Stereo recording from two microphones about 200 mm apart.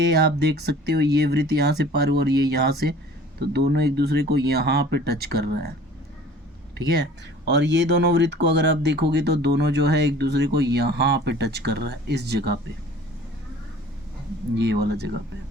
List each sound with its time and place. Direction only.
0.0 s speech: 55° right (ahead or behind)
6.7 s speech: 60° right (ahead or behind)
14.5 s speech: 60° right (ahead or behind)